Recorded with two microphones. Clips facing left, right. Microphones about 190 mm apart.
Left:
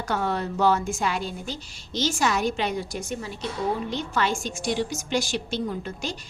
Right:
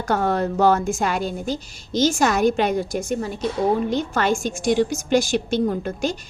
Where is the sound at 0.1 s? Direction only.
45° right (ahead or behind).